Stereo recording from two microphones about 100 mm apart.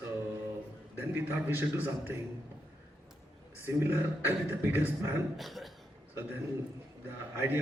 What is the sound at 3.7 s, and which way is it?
Speech, 25° right (ahead or behind).